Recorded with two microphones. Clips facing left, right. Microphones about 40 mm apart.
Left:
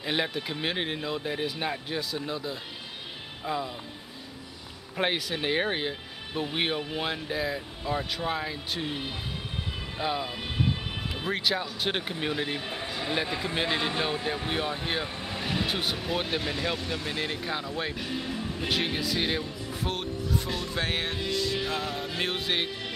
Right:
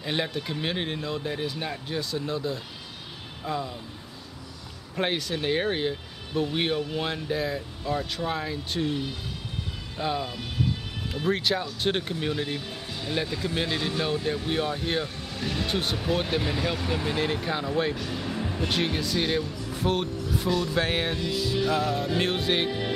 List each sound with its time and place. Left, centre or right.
0.0 s speech: centre
4.9 s speech: centre
9.9 s speech: centre
10.3 s speech: left
11.2 s speech: centre
12.6 s speech: left
13.3 s speech: left
15.1 s speech: left; by 17.6 s centre
17.9 s music: centre
18.7 s speech: centre
21.3 s music: centre
21.5 s speech: centre